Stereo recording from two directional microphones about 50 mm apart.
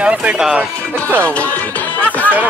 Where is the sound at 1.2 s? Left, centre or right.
Left.